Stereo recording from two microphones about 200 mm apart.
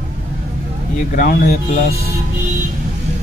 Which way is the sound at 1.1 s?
50° left (ahead or behind).